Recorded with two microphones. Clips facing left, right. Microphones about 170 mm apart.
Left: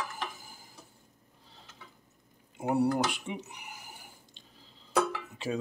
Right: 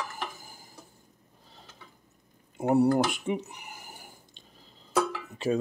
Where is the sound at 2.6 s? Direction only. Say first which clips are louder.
Right 5 dB; 45° right (ahead or behind).